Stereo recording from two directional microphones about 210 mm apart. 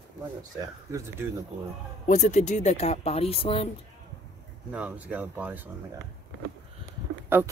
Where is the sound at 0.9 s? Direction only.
15° right (ahead or behind).